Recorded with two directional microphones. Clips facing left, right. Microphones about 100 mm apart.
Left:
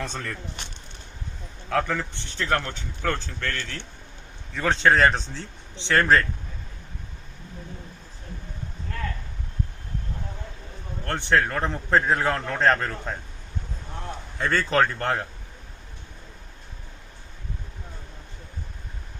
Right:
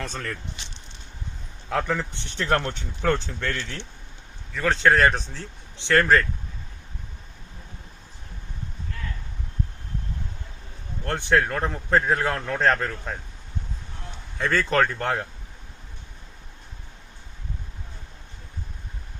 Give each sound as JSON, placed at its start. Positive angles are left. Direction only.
{"t": 0.0, "sound": "a man's voice", "side_deg": 0}
{"t": 0.6, "sound": "a sound", "side_deg": 55}
{"t": 1.7, "sound": "speech", "side_deg": -5}
{"t": 2.4, "sound": "speech", "side_deg": -20}
{"t": 4.5, "sound": "a man's voice", "side_deg": 0}
{"t": 11.0, "sound": "a man's voice", "side_deg": -5}
{"t": 14.3, "sound": "a man's voice", "side_deg": 0}